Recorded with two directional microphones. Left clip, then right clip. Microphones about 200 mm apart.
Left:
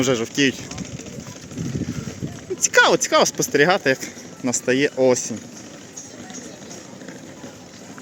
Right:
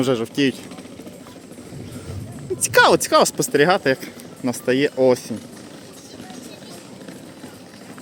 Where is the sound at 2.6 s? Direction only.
15° right (ahead or behind).